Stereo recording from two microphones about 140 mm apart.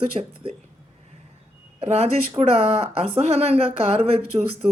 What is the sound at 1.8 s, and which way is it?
Speech, 50° right (ahead or behind).